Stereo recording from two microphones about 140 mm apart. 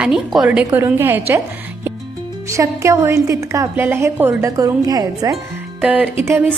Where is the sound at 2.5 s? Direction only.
20° right (ahead or behind).